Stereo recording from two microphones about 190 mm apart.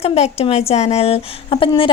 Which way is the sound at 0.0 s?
35° left (ahead or behind).